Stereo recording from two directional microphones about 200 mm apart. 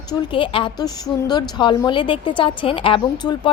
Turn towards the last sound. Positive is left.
turn(degrees=20)  # may be behind; listen again after turning